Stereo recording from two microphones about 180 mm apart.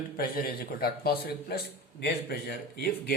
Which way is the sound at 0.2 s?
55° left (ahead or behind).